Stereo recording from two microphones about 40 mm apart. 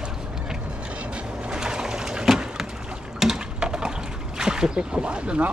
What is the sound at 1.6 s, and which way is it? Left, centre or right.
Pigeon, centre.